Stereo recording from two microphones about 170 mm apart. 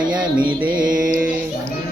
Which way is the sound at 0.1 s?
5° right (ahead or behind).